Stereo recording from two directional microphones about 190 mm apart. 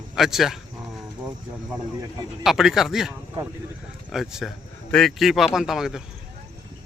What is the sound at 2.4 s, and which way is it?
Speech, centre (ahead or behind).